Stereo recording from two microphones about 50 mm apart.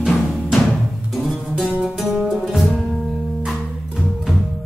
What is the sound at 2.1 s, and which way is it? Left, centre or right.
Music, centre.